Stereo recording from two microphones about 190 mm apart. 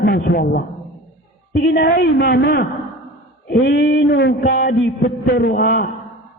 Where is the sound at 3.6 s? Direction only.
55° left (ahead or behind).